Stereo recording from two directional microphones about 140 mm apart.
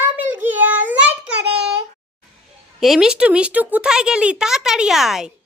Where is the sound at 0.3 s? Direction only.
15° right (ahead or behind).